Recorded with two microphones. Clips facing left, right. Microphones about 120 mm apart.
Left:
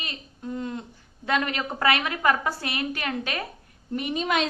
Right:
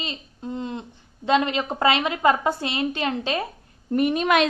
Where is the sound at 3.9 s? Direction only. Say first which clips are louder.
Right 7 dB; 50° right (ahead or behind).